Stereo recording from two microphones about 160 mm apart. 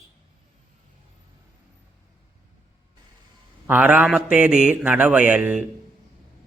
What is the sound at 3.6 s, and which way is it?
A man's voice, 10° right (ahead or behind).